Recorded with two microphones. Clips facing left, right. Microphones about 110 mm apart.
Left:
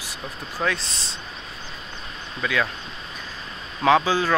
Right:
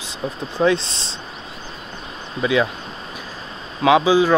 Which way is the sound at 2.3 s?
20° right (ahead or behind).